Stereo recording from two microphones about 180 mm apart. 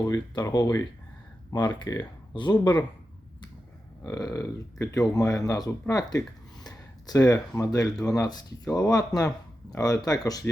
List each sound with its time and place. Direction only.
0.0 s speech: 20° left (ahead or behind)
4.0 s speech: 20° left (ahead or behind)